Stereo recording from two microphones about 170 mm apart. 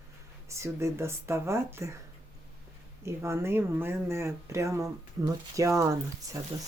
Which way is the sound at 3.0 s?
15° right (ahead or behind).